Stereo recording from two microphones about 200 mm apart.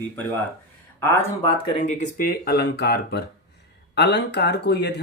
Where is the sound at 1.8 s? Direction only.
40° left (ahead or behind).